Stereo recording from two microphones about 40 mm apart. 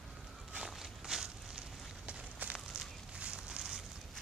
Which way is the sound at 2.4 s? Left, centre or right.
Right.